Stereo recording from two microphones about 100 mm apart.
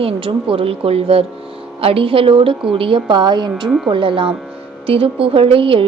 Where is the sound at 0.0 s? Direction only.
70° right (ahead or behind).